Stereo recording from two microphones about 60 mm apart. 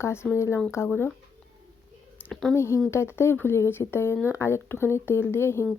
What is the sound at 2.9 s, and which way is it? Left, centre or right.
Speech, left.